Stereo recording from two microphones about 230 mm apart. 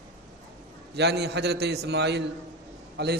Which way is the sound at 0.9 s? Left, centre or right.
Right.